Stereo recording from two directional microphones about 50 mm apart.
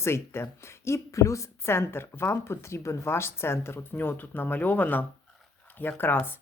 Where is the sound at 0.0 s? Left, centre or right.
Left.